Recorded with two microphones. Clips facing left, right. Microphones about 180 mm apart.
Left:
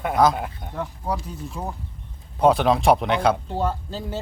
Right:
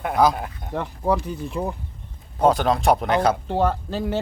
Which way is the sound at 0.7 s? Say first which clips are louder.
Right 7 dB; 60° right (ahead or behind).